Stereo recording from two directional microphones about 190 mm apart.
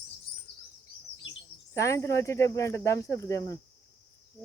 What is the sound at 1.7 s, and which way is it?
Speech, 15° left (ahead or behind).